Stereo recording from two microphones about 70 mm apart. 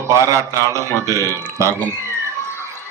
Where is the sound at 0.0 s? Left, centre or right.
Right.